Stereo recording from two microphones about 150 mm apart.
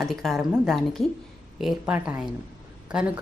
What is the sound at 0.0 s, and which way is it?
A woman's voice, centre (ahead or behind).